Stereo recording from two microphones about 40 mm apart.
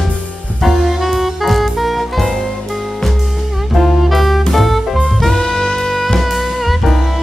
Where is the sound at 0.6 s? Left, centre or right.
Centre.